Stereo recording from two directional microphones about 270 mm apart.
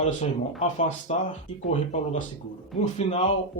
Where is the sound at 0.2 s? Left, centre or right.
Left.